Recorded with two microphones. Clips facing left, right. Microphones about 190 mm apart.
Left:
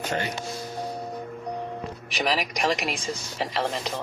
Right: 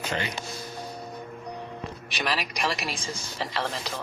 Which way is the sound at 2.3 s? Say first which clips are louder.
Left 4 dB; 15° left (ahead or behind).